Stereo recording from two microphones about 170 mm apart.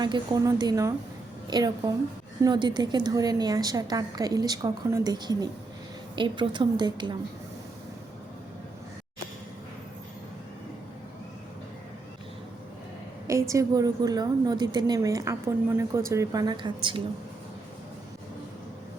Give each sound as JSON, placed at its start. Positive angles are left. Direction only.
{"t": 0.0, "sound": "a woman's voice", "side_deg": -25}
{"t": 13.5, "sound": "a woman's voice", "side_deg": -20}